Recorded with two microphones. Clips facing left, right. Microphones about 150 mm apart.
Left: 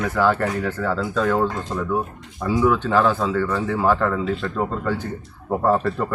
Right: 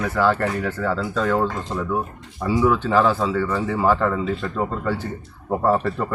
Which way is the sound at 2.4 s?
Centre (ahead or behind).